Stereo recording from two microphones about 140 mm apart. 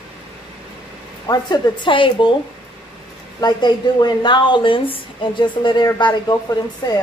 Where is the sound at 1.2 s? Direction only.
30° left (ahead or behind).